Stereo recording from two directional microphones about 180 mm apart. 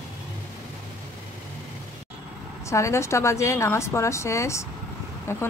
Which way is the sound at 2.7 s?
15° left (ahead or behind).